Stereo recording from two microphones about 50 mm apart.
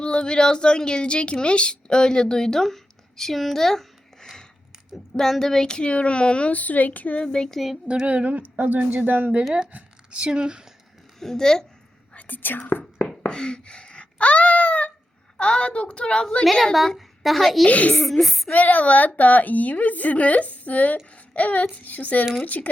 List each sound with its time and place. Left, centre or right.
0.0 s a woman's voice: centre
7.5 s speech: centre
7.9 s female singing: right
8.5 s speech: right
9.7 s speech: centre
11.2 s a child's voice: centre
12.1 s speech: left
13.2 s wail: centre
15.4 s a woman's voice: centre
16.7 s a woman's voice: centre
17.7 s a woman's voice: left
18.0 s speech: centre
18.5 s a woman's voice: left